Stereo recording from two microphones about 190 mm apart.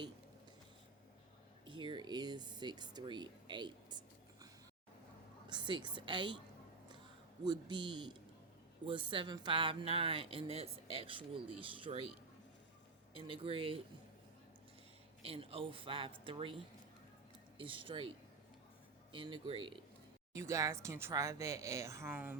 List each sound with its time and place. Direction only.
1.6 s speech: 25° right (ahead or behind)
5.5 s speech: 25° right (ahead or behind)
7.4 s speech: 25° right (ahead or behind)
13.1 s speech: 30° right (ahead or behind)
15.2 s speech: 30° right (ahead or behind)
19.1 s speech: 25° right (ahead or behind)
20.3 s speech: 15° right (ahead or behind)